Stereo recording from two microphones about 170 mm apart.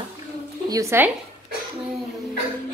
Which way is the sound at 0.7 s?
15° right (ahead or behind).